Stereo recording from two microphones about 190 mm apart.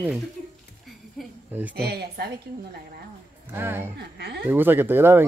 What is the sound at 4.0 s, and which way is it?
Speech, 60° right (ahead or behind).